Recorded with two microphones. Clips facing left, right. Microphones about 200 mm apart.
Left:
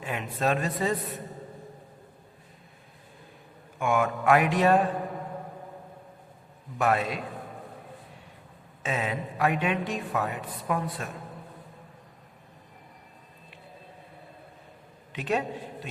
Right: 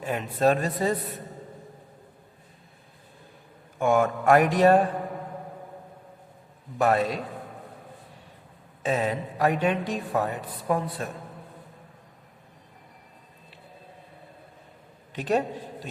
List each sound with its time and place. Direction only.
0.0 s speech: 40° right (ahead or behind)
3.8 s a woman's voice: 40° right (ahead or behind)
6.7 s a woman's voice: 35° right (ahead or behind)
8.8 s a woman's voice: 40° right (ahead or behind)
15.1 s a man's voice: 40° right (ahead or behind)